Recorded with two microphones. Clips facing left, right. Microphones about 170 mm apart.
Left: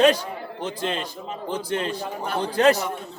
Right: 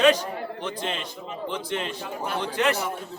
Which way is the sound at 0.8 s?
40° left (ahead or behind).